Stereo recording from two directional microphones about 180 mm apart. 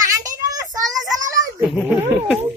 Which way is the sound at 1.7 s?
10° right (ahead or behind).